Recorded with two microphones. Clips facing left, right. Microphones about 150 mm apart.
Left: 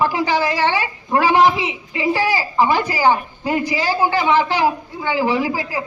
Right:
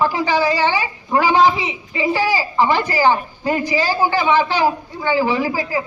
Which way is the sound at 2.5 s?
15° left (ahead or behind).